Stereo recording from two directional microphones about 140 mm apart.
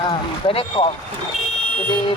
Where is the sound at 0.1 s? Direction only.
40° left (ahead or behind).